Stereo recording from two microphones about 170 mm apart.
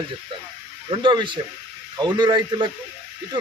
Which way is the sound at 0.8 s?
30° right (ahead or behind).